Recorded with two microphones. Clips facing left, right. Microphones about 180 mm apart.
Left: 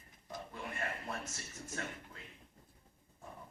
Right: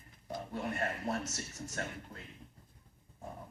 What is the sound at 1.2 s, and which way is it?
Speech, 75° right (ahead or behind).